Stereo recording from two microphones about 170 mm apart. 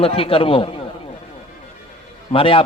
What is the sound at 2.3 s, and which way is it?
Speech, 30° left (ahead or behind).